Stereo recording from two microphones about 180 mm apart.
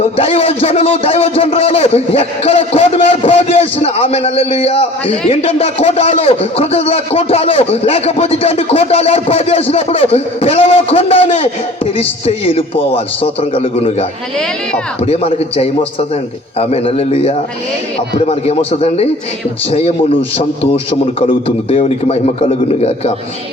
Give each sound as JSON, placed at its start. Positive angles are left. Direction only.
{"t": 0.2, "sound": "a man's voice", "side_deg": 30}
{"t": 21.2, "sound": "a man's voice", "side_deg": 30}